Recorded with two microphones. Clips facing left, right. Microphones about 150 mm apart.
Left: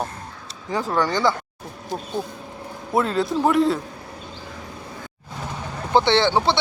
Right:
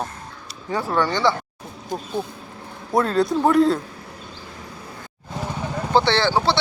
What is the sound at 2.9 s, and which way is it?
Speech, 5° left (ahead or behind).